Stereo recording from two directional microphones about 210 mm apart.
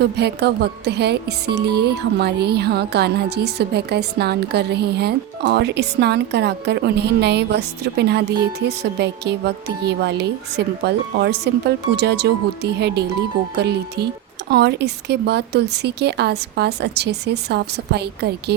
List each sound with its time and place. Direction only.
0.0 s speech: 50° right (ahead or behind)